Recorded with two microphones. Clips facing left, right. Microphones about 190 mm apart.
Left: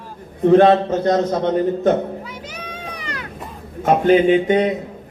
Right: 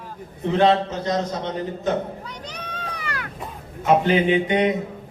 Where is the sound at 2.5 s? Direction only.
10° left (ahead or behind).